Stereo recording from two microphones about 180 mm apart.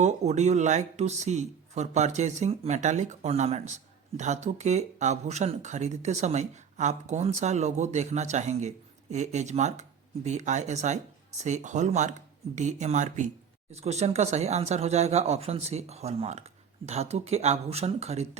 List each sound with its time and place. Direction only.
0.0 s speech: 40° right (ahead or behind)